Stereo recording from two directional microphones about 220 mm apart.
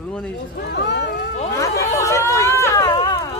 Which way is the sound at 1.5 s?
15° left (ahead or behind).